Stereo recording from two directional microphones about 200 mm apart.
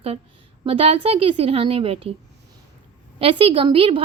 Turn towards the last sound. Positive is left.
turn(degrees=-25)  # may be behind; listen again after turning